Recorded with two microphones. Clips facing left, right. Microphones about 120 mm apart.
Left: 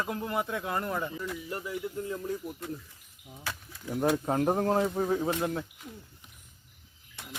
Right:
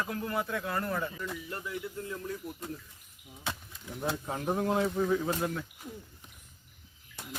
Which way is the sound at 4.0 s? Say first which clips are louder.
Left 8 dB; 50° left (ahead or behind).